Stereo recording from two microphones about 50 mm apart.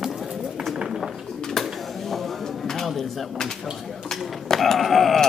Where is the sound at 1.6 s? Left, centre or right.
Centre.